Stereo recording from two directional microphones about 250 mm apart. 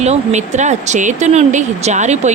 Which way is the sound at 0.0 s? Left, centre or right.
Right.